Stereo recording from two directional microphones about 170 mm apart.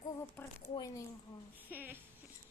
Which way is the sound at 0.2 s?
15° left (ahead or behind).